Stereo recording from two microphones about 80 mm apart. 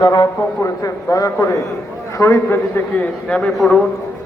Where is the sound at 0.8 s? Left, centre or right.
Left.